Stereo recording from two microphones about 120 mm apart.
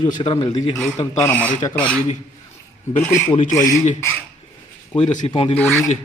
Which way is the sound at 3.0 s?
20° left (ahead or behind).